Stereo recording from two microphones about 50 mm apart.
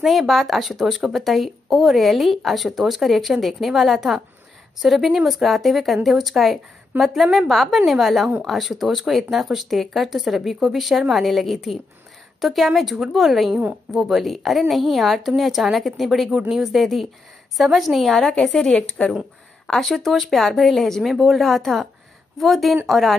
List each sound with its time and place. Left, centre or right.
0.0 s speech: centre
18.3 s speech: centre
18.7 s speech: left
19.6 s speech: centre